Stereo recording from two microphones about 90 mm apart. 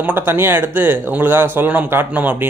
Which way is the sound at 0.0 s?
25° right (ahead or behind).